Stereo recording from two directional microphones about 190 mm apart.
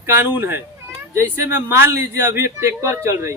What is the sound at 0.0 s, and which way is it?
A man's voice, 10° right (ahead or behind).